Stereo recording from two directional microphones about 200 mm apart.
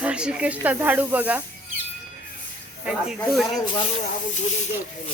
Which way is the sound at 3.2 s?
Centre (ahead or behind).